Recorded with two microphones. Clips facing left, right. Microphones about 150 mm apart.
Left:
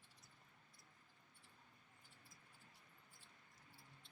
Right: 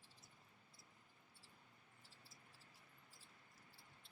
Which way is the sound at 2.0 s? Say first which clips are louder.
Right 2 dB; 30° right (ahead or behind).